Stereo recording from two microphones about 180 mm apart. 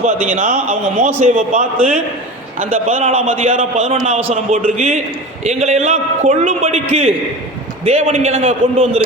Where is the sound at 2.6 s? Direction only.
35° right (ahead or behind).